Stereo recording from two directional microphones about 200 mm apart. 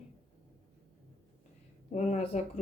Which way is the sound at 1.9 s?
35° left (ahead or behind).